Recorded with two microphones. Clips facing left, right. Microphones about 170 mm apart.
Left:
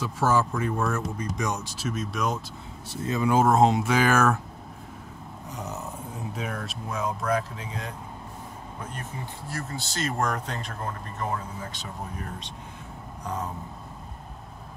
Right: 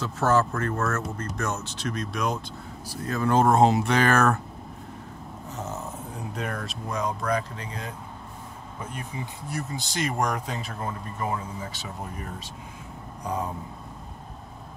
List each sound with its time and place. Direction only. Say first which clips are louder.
0.0 s speech: right 1 dB; 10° left (ahead or behind)
2.9 s speech: left 1 dB; 20° left (ahead or behind)
3.3 s speech: right 1 dB; 5° left (ahead or behind)
5.6 s speech: right 1 dB; centre (ahead or behind)
9.5 s speech: right 2 dB; 15° right (ahead or behind)